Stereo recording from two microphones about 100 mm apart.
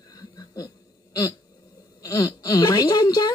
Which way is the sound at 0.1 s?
40° left (ahead or behind).